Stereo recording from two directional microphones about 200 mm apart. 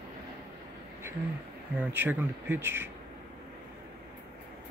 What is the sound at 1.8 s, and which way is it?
Speech, 10° right (ahead or behind).